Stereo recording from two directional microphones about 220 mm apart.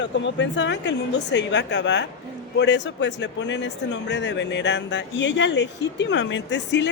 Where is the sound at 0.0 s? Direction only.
55° left (ahead or behind).